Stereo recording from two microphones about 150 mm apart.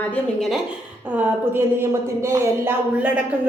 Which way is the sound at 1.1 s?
15° right (ahead or behind).